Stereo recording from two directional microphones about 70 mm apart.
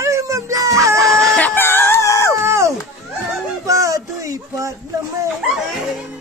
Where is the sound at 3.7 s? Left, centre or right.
Right.